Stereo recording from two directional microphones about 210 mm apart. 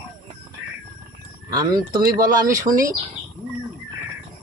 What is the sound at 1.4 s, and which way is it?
Child singing, 20° right (ahead or behind).